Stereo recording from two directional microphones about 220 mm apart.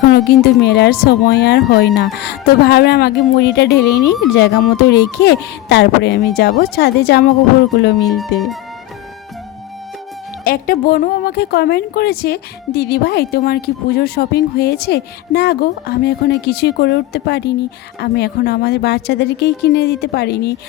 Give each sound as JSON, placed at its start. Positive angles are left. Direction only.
{"t": 0.1, "sound": "a woman's voice", "side_deg": 50}
{"t": 8.1, "sound": "speech", "side_deg": 0}
{"t": 10.4, "sound": "a woman's voice", "side_deg": 40}